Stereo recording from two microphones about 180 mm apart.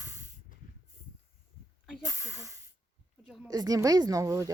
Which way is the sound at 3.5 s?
20° right (ahead or behind).